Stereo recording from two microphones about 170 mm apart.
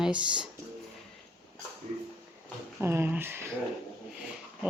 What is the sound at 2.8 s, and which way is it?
Speech, 15° right (ahead or behind).